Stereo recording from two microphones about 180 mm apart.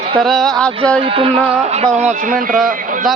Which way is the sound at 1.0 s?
30° right (ahead or behind).